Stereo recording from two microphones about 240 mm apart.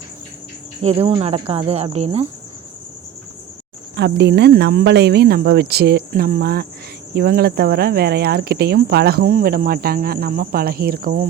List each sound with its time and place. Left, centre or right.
0.8 s cricket: right
3.9 s speech: right